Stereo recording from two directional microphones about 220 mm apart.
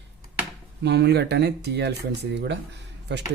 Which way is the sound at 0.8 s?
50° right (ahead or behind).